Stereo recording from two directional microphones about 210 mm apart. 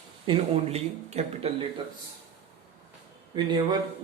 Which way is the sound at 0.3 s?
25° right (ahead or behind).